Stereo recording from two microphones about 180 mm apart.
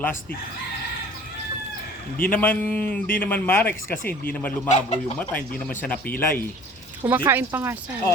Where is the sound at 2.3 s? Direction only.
10° left (ahead or behind).